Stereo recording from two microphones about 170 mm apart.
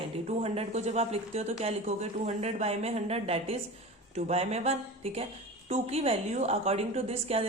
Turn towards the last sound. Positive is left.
turn(degrees=-35)  # may be behind; listen again after turning